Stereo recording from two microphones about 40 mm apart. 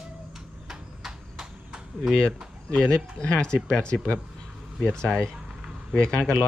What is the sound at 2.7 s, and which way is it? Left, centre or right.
Speech, centre.